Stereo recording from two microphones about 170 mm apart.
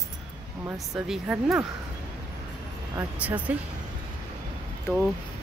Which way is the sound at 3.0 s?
10° right (ahead or behind).